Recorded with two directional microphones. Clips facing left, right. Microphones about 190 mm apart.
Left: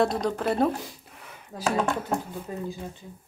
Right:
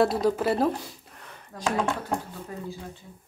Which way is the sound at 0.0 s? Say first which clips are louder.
Right 2 dB; 5° right (ahead or behind).